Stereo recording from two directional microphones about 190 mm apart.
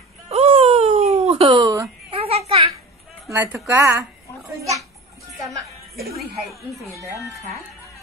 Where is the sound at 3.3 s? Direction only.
15° right (ahead or behind).